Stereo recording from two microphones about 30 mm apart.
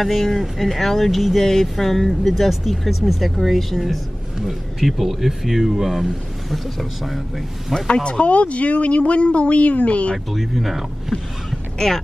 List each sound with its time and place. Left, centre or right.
0.0 s speech: centre
4.4 s speech: centre
7.9 s speech: left
10.1 s speech: centre